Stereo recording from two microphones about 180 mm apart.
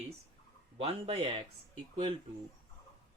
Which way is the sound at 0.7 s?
30° right (ahead or behind).